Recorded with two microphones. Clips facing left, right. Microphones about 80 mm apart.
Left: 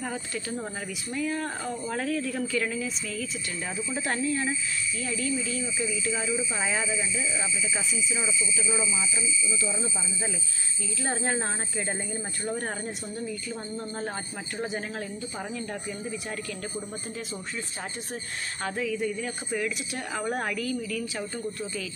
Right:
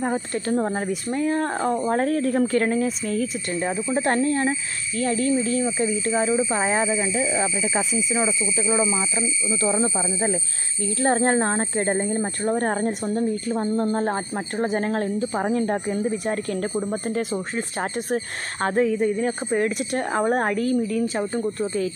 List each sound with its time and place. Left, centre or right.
0.0 s speech: right